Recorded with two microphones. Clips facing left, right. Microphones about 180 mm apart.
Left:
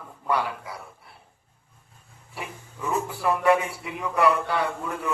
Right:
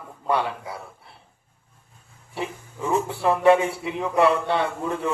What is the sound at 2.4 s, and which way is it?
A man's voice, 25° right (ahead or behind).